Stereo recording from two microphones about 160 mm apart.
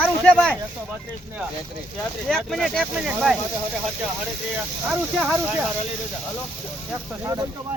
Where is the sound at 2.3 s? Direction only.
5° left (ahead or behind).